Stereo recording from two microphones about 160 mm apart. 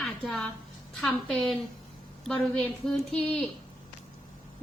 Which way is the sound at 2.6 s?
5° left (ahead or behind).